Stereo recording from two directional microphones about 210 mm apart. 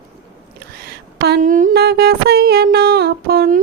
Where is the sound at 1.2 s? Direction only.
45° right (ahead or behind).